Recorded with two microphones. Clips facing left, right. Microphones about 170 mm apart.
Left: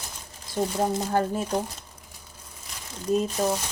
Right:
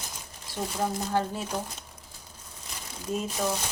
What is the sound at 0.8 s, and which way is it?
Speech, 45° left (ahead or behind).